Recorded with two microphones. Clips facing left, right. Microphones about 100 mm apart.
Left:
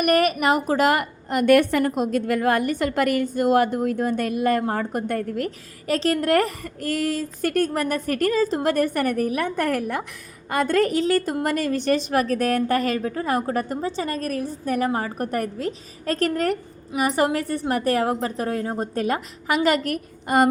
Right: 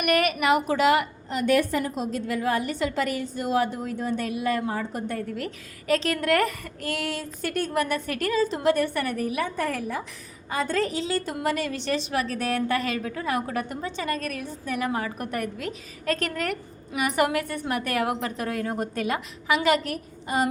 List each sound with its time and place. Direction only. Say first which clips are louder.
0.0 s a woman's voice: left 4 dB; 40° left (ahead or behind)
5.9 s a woman's voice: left 3 dB; 35° left (ahead or behind); by 20.5 s 55° left (ahead or behind)